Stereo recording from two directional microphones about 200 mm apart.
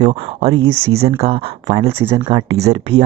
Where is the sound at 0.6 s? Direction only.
10° right (ahead or behind).